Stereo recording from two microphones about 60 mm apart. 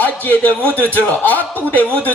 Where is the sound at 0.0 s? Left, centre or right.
Left.